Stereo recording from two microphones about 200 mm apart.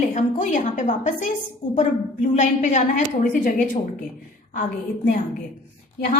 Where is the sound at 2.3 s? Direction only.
40° left (ahead or behind).